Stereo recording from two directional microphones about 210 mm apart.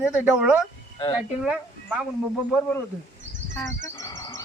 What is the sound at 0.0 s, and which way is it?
Speech, 5° right (ahead or behind).